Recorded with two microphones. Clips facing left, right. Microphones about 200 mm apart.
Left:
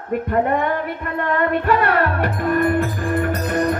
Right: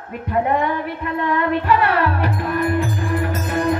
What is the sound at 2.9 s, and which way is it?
Music, 50° left (ahead or behind).